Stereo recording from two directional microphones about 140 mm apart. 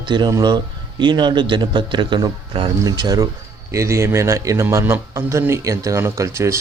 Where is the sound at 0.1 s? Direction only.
30° right (ahead or behind).